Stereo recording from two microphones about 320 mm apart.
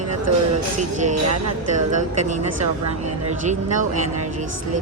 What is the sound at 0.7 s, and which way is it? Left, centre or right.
Speech, right.